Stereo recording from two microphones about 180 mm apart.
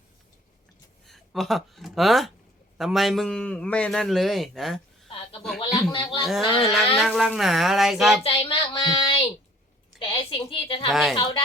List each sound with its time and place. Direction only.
1.0 s a man's voice: centre (ahead or behind)
5.5 s speech: 30° left (ahead or behind)
6.6 s a man's voice: centre (ahead or behind)
8.2 s a sound: 30° left (ahead or behind)
11.1 s speech: 25° left (ahead or behind)